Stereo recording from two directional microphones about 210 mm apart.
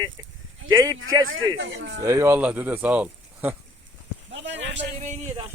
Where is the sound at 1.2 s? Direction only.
75° right (ahead or behind); by 1.9 s 55° right (ahead or behind).